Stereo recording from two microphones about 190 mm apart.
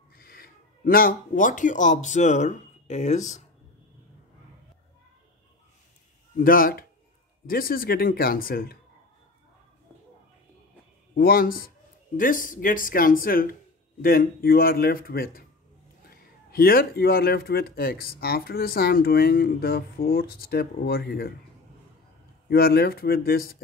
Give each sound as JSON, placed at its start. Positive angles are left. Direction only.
{"t": 0.1, "sound": "speech", "side_deg": 50}
{"t": 6.3, "sound": "speech", "side_deg": 50}
{"t": 11.1, "sound": "speech", "side_deg": 50}
{"t": 22.5, "sound": "speech", "side_deg": 55}